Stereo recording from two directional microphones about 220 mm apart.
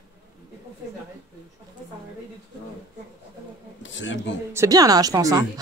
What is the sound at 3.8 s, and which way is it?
Speech, 55° left (ahead or behind).